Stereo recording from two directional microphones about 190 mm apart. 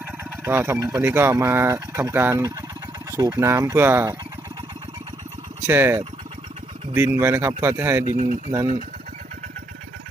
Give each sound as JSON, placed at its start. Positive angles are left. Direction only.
{"t": 0.3, "sound": "speech", "side_deg": -10}
{"t": 5.6, "sound": "speech", "side_deg": -10}
{"t": 8.1, "sound": "speech", "side_deg": -40}